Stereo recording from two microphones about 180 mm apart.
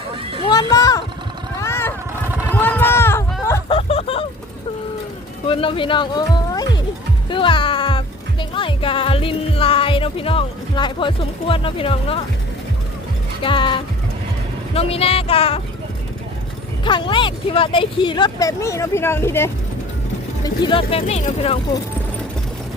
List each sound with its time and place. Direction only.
0.1 s children playing: 30° right (ahead or behind)
0.4 s a sound: 20° left (ahead or behind)
1.6 s vehicle: 15° left (ahead or behind)
2.5 s a sound: 10° left (ahead or behind)
3.7 s vehicle: 30° left (ahead or behind)
5.5 s speech: 30° left (ahead or behind)
13.4 s speech: 25° left (ahead or behind)
16.8 s speech: 25° left (ahead or behind)
20.4 s speech: 25° left (ahead or behind)